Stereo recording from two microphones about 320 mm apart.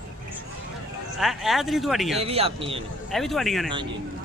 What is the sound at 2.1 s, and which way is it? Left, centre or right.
Speech, centre.